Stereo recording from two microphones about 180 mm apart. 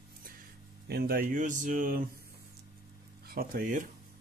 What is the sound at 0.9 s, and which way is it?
Speech, 55° right (ahead or behind).